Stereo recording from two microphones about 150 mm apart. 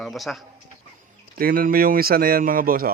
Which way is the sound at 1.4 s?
70° right (ahead or behind).